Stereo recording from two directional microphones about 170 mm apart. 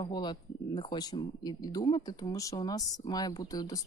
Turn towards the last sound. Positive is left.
turn(degrees=20)  # may be behind; listen again after turning